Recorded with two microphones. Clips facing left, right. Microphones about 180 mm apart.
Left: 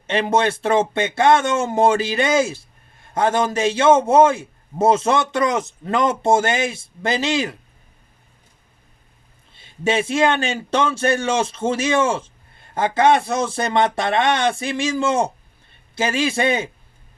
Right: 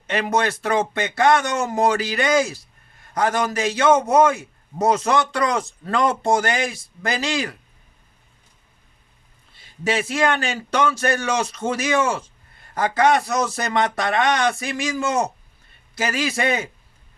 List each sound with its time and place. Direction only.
0.1 s speech: 25° left (ahead or behind)
9.6 s speech: 25° left (ahead or behind)